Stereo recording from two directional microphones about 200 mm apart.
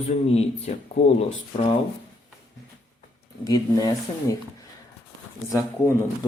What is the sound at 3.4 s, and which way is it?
Speech, 20° left (ahead or behind).